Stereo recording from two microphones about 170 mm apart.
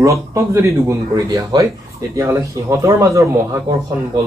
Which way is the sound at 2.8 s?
20° right (ahead or behind).